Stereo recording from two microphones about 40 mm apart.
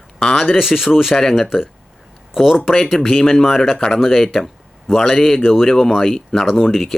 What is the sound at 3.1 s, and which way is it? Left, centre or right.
Speech, centre.